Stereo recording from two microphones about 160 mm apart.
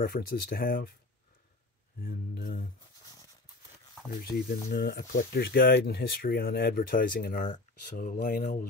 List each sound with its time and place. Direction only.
0.0 s speech: 70° left (ahead or behind)
2.0 s speech: 65° left (ahead or behind)
4.2 s speech: 80° left; by 8.6 s 60° left (ahead or behind)